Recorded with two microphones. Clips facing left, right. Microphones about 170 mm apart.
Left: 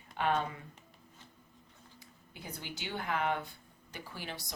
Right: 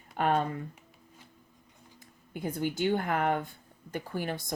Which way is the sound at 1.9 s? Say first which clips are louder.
Right 12 dB; 50° right (ahead or behind).